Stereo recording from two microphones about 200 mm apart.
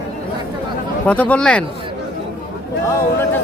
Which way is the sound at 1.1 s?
5° left (ahead or behind).